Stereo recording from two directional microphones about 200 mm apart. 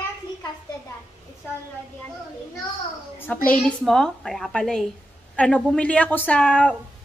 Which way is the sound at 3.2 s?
10° left (ahead or behind).